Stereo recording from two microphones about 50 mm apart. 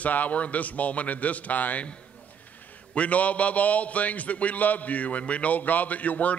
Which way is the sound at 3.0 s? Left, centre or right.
Left.